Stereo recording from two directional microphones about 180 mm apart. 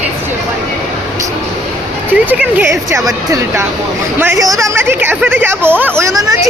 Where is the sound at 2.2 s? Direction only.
10° right (ahead or behind).